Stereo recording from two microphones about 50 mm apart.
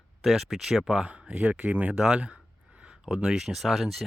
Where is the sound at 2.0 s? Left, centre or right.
Centre.